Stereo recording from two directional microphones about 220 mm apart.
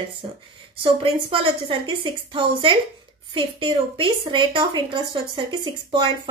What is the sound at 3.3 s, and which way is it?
A woman's voice, 20° right (ahead or behind).